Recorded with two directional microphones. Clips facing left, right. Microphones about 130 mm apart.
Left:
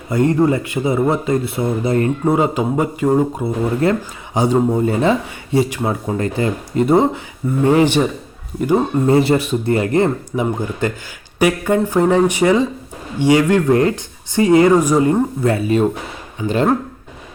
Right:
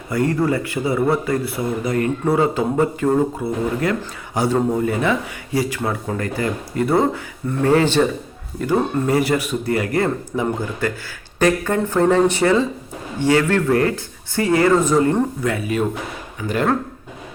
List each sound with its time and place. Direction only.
0.1 s speech: 25° left (ahead or behind)
11.3 s speech: 10° left (ahead or behind)
15.4 s speech: 30° left (ahead or behind)